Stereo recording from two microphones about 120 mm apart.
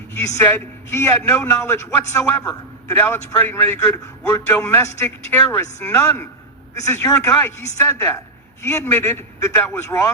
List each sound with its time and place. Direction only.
0.4 s a man's voice: 20° left (ahead or behind)